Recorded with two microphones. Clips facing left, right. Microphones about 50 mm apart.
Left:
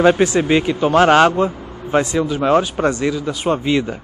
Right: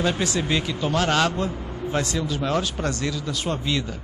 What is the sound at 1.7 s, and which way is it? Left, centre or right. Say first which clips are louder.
Vehicle: left 8 dB; left.